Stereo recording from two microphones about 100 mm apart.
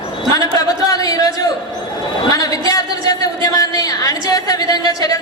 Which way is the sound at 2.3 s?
35° left (ahead or behind).